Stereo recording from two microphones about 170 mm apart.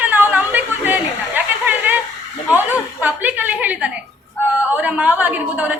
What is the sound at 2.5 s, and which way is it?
Chuckle, 10° right (ahead or behind).